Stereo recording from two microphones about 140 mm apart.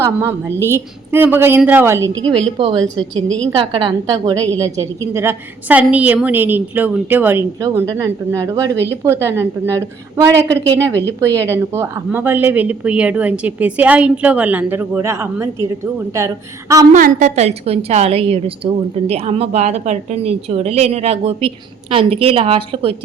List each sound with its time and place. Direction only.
0.0 s speech: 20° right (ahead or behind)
2.6 s a woman's voice: 40° right (ahead or behind)
2.8 s a woman's voice: 5° left (ahead or behind)
3.6 s a woman's voice: 35° right (ahead or behind)
4.0 s speech: 25° right (ahead or behind)
16.9 s a woman's voice: 60° right (ahead or behind); by 23.0 s 40° right (ahead or behind)